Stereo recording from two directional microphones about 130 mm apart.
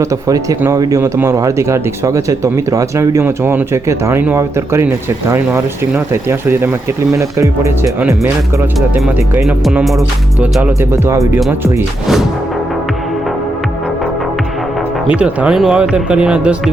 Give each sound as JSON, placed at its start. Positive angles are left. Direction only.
{"t": 0.0, "sound": "speech", "side_deg": -25}
{"t": 6.2, "sound": "speech", "side_deg": -20}
{"t": 10.4, "sound": "speech", "side_deg": -10}
{"t": 10.9, "sound": "speech", "side_deg": -20}
{"t": 11.2, "sound": "speech", "side_deg": 0}
{"t": 15.1, "sound": "speech", "side_deg": -10}